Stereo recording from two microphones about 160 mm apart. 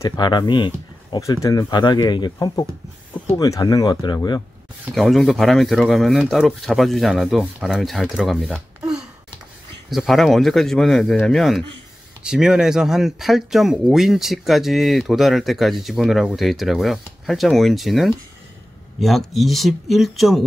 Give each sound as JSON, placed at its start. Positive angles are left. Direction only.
{"t": 0.0, "sound": "speech", "side_deg": 25}
{"t": 4.9, "sound": "speech", "side_deg": 0}
{"t": 9.8, "sound": "speech", "side_deg": 0}